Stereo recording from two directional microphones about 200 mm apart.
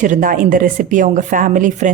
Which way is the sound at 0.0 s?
40° right (ahead or behind).